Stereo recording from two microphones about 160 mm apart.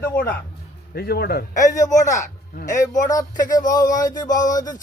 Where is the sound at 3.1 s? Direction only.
25° left (ahead or behind).